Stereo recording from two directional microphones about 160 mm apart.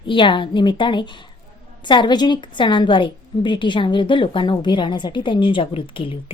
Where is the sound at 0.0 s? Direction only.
30° left (ahead or behind).